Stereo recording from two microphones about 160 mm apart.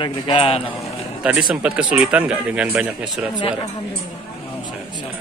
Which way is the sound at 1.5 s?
5° right (ahead or behind).